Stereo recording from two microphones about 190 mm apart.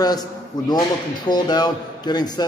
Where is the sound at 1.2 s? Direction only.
20° left (ahead or behind).